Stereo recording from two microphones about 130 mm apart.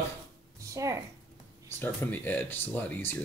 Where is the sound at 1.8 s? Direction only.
15° left (ahead or behind).